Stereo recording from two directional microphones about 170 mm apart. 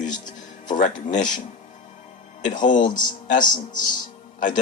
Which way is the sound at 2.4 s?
50° left (ahead or behind).